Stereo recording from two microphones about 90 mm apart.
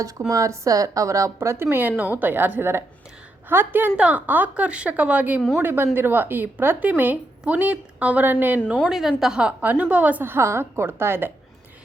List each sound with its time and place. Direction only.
0.3 s a woman's voice: 40° right (ahead or behind); by 8.8 s 20° right (ahead or behind)
8.9 s speech: 5° right (ahead or behind); by 11.3 s 25° right (ahead or behind)